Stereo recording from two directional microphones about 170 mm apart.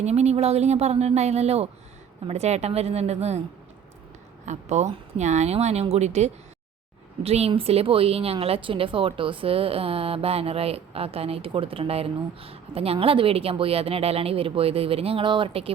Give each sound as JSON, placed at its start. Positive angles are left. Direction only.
{"t": 0.0, "sound": "speech", "side_deg": -40}
{"t": 4.4, "sound": "speech", "side_deg": -40}